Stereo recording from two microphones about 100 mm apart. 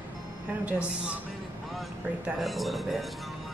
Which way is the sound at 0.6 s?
10° right (ahead or behind).